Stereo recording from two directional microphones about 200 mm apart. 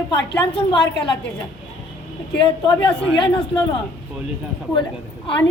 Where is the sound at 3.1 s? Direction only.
25° left (ahead or behind).